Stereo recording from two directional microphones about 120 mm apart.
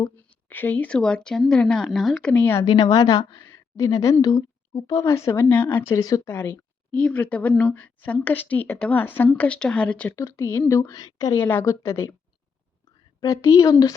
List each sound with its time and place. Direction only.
0.5 s speech: 15° left (ahead or behind)
2.6 s a woman's voice: 35° left (ahead or behind); by 6.0 s 15° left (ahead or behind)
6.0 s a woman's voice: 30° left (ahead or behind)
6.3 s a woman's voice: 10° left (ahead or behind)
10.2 s speech: 25° left (ahead or behind)
11.3 s speech: 20° left (ahead or behind)
13.1 s speech: 25° left (ahead or behind)